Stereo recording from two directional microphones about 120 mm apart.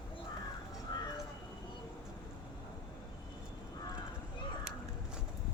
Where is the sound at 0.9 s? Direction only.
40° left (ahead or behind).